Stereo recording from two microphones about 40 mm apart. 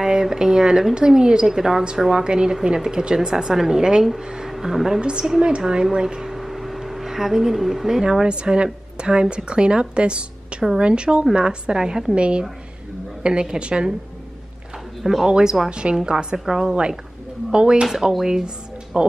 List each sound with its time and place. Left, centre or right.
0.0 s speech: centre
4.5 s speech: centre
5.0 s a woman's voice: right
6.2 s a woman's voice: centre; by 13.9 s right
15.0 s speech: centre
15.7 s a woman's voice: right